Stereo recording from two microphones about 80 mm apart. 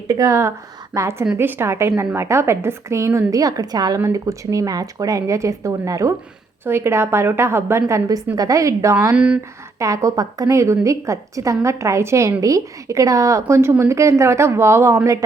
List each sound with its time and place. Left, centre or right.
0.1 s speech: right
1.4 s speech: right
4.0 s speech: right
6.7 s speech: right
9.1 s speech: centre
9.7 s speech: right